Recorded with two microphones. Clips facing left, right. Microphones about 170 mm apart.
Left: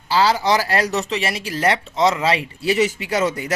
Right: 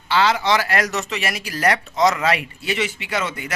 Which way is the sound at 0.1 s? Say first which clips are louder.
Left 1 dB; 35° left (ahead or behind).